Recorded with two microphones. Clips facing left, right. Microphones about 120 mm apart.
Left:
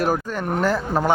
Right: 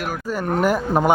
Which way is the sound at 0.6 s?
15° right (ahead or behind).